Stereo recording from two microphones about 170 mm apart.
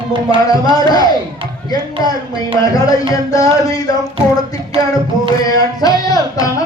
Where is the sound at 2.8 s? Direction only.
20° left (ahead or behind).